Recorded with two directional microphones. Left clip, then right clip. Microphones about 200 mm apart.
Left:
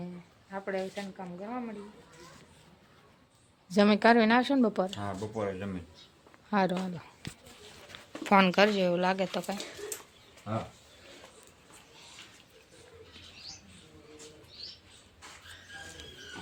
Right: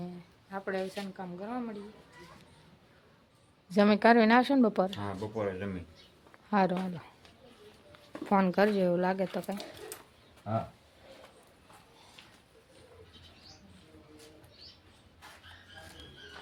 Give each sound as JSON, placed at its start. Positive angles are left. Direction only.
{"t": 0.5, "sound": "speech", "side_deg": -5}
{"t": 3.7, "sound": "speech", "side_deg": 5}
{"t": 4.9, "sound": "speech", "side_deg": 5}
{"t": 8.2, "sound": "speech", "side_deg": 0}
{"t": 8.5, "sound": "speech", "side_deg": -15}